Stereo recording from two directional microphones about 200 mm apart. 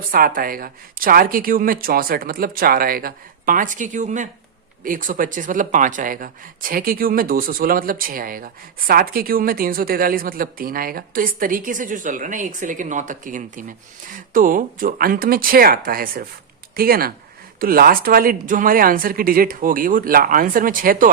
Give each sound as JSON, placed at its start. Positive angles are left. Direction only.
{"t": 0.1, "sound": "a woman's voice", "side_deg": -45}